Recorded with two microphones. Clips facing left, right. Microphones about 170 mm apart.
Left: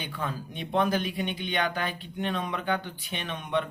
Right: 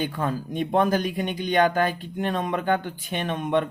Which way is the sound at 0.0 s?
45° right (ahead or behind).